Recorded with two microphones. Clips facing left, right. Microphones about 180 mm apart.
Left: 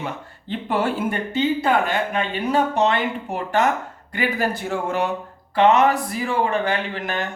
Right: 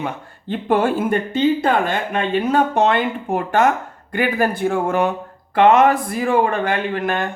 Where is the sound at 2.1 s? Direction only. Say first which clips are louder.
Right 6 dB; 50° right (ahead or behind).